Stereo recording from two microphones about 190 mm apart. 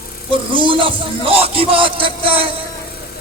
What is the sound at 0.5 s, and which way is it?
Speech, 25° right (ahead or behind).